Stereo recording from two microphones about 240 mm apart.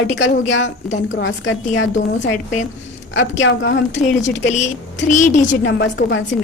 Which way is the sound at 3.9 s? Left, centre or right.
Left.